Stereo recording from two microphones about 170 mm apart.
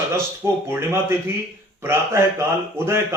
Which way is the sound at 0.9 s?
15° right (ahead or behind).